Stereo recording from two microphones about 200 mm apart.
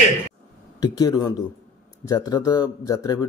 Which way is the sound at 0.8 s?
20° left (ahead or behind).